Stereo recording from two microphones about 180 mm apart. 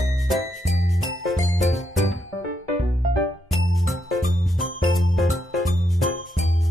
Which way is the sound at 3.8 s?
Centre (ahead or behind).